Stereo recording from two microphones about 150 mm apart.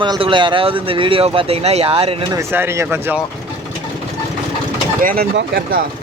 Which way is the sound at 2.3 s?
20° right (ahead or behind).